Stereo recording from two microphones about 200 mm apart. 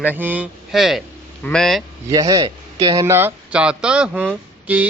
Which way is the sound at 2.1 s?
15° right (ahead or behind).